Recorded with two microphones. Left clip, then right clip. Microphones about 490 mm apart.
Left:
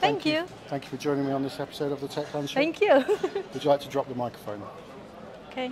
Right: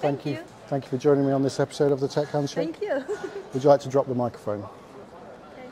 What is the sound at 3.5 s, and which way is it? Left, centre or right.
Speech, right.